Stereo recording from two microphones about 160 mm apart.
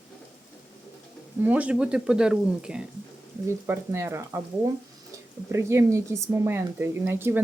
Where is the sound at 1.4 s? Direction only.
10° right (ahead or behind).